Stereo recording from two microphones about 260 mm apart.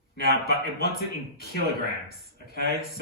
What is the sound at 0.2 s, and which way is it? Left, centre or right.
Speech, left.